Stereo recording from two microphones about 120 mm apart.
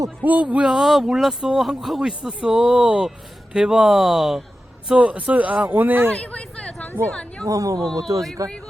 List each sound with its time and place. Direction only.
0.3 s speech: 10° right (ahead or behind)
6.1 s a sound: 10° left (ahead or behind)
7.1 s speech: 10° left (ahead or behind)
7.4 s speech: 30° right (ahead or behind)